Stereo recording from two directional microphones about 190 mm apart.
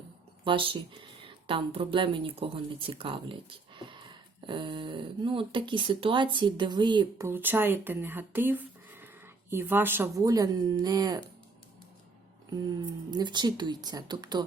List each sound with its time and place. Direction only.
0.4 s speech: 25° right (ahead or behind)
12.5 s speech: 20° right (ahead or behind)